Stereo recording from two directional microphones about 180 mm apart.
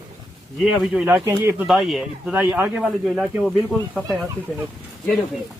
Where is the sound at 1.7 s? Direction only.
Centre (ahead or behind).